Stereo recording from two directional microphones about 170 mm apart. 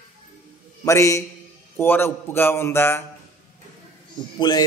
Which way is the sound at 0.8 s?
20° left (ahead or behind).